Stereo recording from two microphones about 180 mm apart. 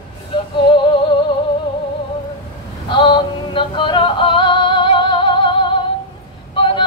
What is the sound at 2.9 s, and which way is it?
Music, 25° left (ahead or behind).